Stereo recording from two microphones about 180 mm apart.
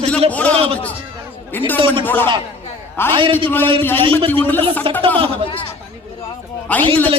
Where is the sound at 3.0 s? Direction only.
10° left (ahead or behind).